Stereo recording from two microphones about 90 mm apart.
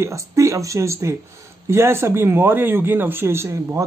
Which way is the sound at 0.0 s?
35° right (ahead or behind).